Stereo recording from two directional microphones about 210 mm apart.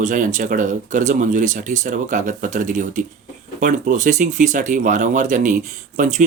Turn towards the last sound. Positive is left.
turn(degrees=-35)  # may be behind; listen again after turning